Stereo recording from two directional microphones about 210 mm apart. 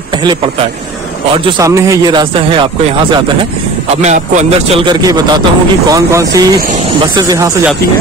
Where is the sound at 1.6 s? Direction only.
15° right (ahead or behind); by 4.7 s 35° right (ahead or behind).